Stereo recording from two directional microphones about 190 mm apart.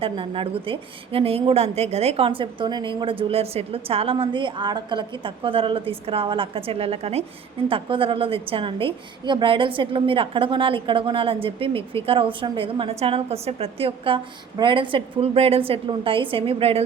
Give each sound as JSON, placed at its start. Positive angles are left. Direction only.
{"t": 0.0, "sound": "a woman's voice", "side_deg": -30}